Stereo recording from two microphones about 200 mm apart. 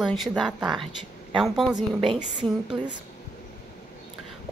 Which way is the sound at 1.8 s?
25° right (ahead or behind).